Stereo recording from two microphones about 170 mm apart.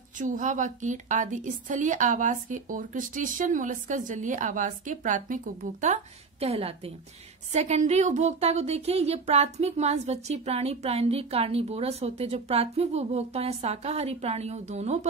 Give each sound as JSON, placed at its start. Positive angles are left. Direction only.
{"t": 0.2, "sound": "a woman's voice", "side_deg": -50}
{"t": 6.4, "sound": "a woman's voice", "side_deg": -35}